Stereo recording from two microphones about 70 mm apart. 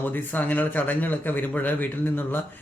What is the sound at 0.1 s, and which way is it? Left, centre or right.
Speech, left.